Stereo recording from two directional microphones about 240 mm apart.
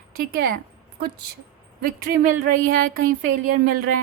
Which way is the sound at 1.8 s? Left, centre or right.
Right.